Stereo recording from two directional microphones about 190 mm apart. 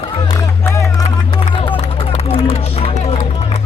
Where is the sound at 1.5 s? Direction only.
30° left (ahead or behind).